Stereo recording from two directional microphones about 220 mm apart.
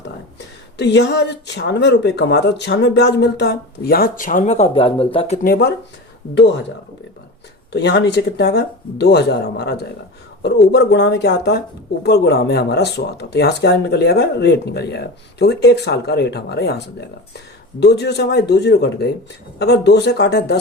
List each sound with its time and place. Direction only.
0.8 s speech: 50° left (ahead or behind); by 5.4 s 25° left (ahead or behind)
5.4 s speech: 45° left (ahead or behind)
7.7 s speech: 50° left (ahead or behind)